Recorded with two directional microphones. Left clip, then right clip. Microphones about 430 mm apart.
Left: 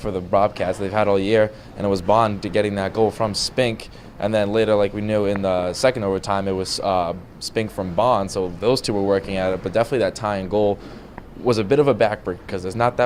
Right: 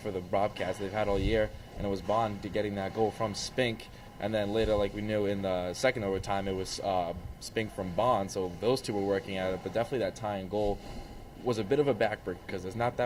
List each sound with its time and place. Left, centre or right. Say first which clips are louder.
0.0 s speech: left 12 dB; left